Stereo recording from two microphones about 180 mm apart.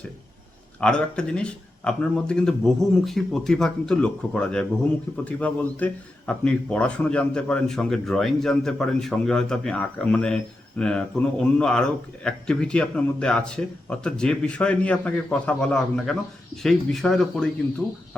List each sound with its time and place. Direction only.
0.8 s speech: 5° left (ahead or behind)